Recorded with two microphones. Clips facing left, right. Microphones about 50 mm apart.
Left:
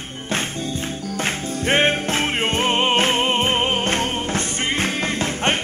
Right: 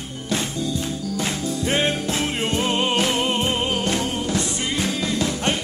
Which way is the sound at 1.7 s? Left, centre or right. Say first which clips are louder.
Left 5 dB; left.